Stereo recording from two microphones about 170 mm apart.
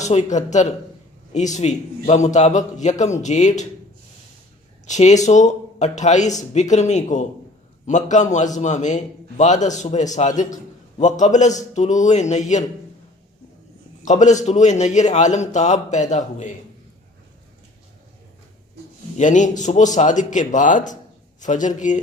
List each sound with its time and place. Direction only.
0.0 s a man's voice: 45° left (ahead or behind)
4.9 s a man's voice: 45° left (ahead or behind)
14.0 s a man's voice: 45° left (ahead or behind)
19.1 s a man's voice: 45° left (ahead or behind)